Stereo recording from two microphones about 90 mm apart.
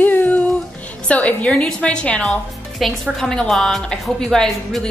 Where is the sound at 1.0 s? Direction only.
15° left (ahead or behind).